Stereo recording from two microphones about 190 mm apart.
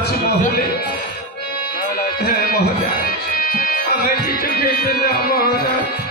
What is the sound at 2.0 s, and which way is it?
Speech, 55° left (ahead or behind).